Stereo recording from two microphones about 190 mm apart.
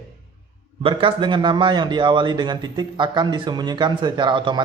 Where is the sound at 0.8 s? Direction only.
30° right (ahead or behind).